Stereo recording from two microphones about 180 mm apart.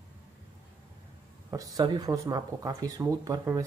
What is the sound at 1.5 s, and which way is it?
Speech, 20° right (ahead or behind).